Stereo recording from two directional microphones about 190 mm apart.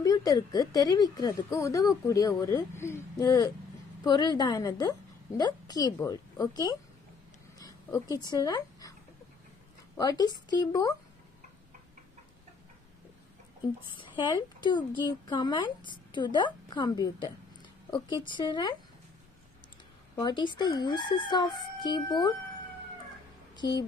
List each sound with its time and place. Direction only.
0.0 s a woman's voice: 20° left (ahead or behind)
7.5 s dog: 20° left (ahead or behind)
9.9 s a woman's voice: 20° left (ahead or behind)
13.9 s a woman's voice: 25° left (ahead or behind)
20.2 s a woman's voice: 25° left (ahead or behind)
23.5 s speech: 20° left (ahead or behind)